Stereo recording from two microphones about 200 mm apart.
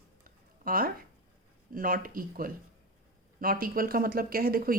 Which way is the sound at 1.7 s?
45° right (ahead or behind).